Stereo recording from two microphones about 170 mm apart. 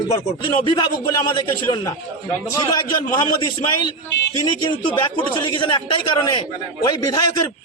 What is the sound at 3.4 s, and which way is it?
Speech, 25° left (ahead or behind).